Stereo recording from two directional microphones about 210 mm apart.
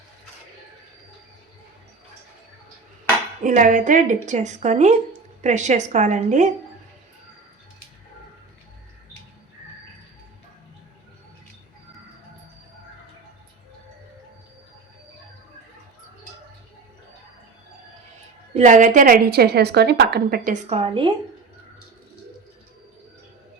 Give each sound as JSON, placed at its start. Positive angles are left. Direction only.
{"t": 3.4, "sound": "a woman's voice", "side_deg": -40}
{"t": 18.5, "sound": "a woman's voice", "side_deg": -35}